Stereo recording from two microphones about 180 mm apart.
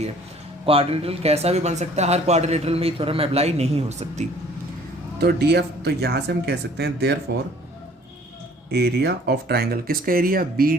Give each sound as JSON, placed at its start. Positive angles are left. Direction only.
{"t": 0.6, "sound": "speech", "side_deg": -30}
{"t": 5.2, "sound": "speech", "side_deg": -60}
{"t": 8.7, "sound": "speech", "side_deg": -65}